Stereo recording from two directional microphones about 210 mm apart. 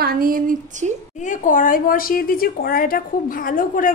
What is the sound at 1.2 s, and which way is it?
Speech, 40° left (ahead or behind).